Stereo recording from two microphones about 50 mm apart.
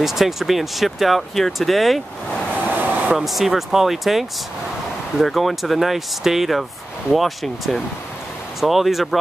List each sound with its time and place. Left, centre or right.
0.0 s speech: centre
2.7 s a sound: right
3.2 s speech: centre